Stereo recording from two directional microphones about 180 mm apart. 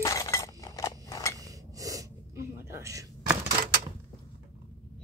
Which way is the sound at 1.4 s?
20° right (ahead or behind).